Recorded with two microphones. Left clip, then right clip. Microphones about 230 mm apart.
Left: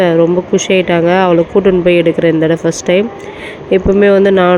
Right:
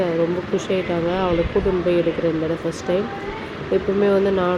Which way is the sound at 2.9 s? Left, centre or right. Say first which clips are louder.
Left 9 dB; left.